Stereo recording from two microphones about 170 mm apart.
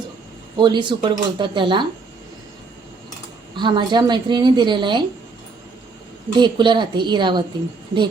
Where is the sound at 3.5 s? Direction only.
25° right (ahead or behind).